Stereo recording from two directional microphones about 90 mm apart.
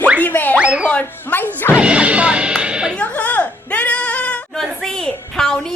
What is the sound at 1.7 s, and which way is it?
Speech, 10° right (ahead or behind).